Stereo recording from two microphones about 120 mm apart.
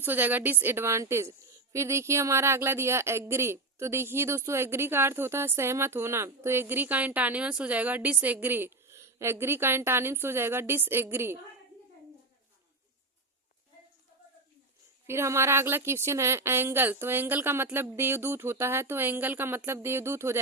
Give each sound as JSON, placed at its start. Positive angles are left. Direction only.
{"t": 0.0, "sound": "a woman's voice", "side_deg": -15}
{"t": 15.0, "sound": "speech", "side_deg": -20}